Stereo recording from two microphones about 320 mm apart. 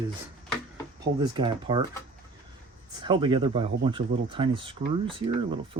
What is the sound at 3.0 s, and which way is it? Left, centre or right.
Speech, centre.